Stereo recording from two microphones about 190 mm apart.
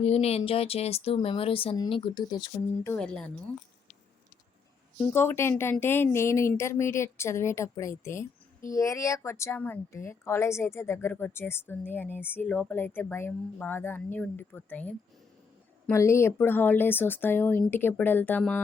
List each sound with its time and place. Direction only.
0.0 s speech: 35° left (ahead or behind)
2.8 s speech: 10° left (ahead or behind)
4.9 s speech: 10° left (ahead or behind)